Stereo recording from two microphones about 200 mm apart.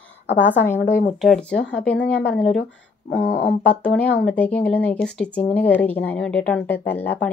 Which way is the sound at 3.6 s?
5° left (ahead or behind).